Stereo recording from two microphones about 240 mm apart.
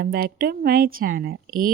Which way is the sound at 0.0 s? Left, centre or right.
Right.